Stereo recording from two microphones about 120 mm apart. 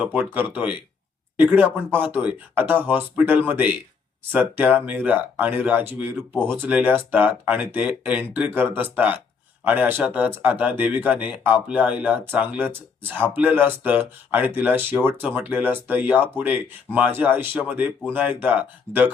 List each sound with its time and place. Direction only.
0.0 s speech: 15° right (ahead or behind)